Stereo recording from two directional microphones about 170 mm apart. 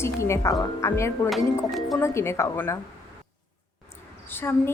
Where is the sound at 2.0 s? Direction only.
15° left (ahead or behind).